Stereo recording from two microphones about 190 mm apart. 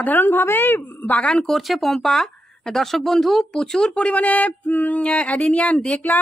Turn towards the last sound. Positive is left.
turn(degrees=5)  # may be behind; listen again after turning